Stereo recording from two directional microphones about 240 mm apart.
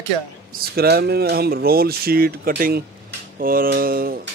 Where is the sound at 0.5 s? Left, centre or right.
Right.